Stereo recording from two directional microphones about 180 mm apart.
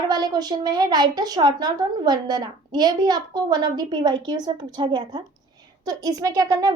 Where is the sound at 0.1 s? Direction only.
20° right (ahead or behind).